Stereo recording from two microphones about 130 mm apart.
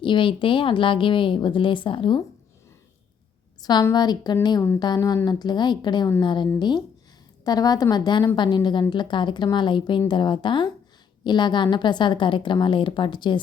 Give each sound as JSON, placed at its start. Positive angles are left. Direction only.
{"t": 0.0, "sound": "a woman's voice", "side_deg": 40}
{"t": 3.6, "sound": "a woman's voice", "side_deg": 35}